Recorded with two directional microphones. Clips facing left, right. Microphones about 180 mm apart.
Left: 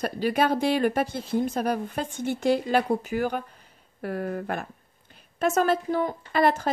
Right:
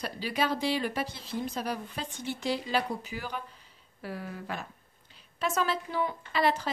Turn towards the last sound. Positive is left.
turn(degrees=50)  # may be behind; listen again after turning